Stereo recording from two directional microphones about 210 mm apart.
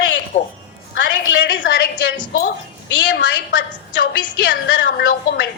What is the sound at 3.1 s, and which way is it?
A woman's voice, 60° left (ahead or behind).